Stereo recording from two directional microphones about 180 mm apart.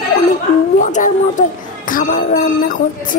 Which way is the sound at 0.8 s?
45° left (ahead or behind).